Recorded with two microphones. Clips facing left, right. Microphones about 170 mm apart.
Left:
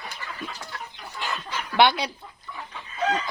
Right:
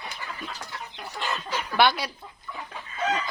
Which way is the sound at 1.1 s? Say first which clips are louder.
Right 1 dB; 65° right (ahead or behind).